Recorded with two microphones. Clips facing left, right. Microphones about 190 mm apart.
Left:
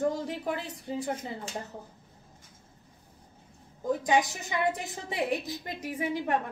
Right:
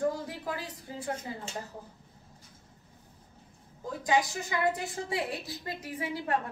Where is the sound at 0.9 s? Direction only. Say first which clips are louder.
Left 9 dB; 20° left (ahead or behind).